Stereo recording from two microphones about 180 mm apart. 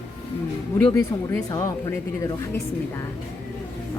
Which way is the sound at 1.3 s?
20° left (ahead or behind).